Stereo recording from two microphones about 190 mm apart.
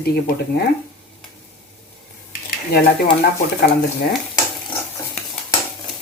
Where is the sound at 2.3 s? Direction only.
50° left (ahead or behind).